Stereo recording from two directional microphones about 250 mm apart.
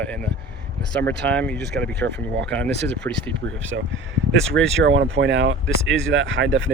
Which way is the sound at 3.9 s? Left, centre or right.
Right.